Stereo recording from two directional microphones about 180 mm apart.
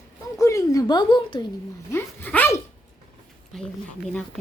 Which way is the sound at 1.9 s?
10° left (ahead or behind).